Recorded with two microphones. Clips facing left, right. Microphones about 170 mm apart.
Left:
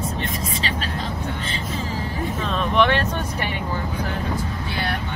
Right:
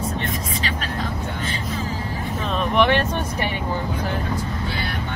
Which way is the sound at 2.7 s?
15° right (ahead or behind).